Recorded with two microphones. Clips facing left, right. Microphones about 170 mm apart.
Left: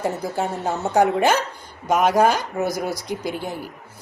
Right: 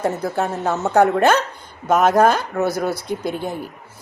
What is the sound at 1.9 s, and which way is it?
Speech, 50° right (ahead or behind).